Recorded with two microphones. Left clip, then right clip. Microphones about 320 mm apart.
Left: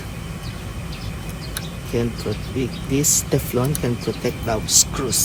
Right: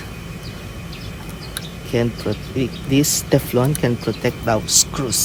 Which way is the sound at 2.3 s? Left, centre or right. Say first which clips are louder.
Right 2 dB; right.